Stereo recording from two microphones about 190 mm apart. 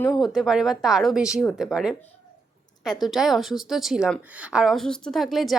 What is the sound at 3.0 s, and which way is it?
A woman's voice, centre (ahead or behind).